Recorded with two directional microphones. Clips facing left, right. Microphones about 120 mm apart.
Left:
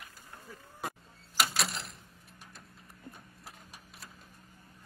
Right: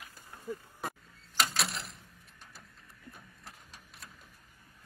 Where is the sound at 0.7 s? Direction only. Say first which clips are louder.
Even; 5° left (ahead or behind).